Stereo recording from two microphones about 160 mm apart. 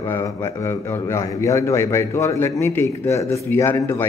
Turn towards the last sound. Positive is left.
turn(degrees=15)  # may be behind; listen again after turning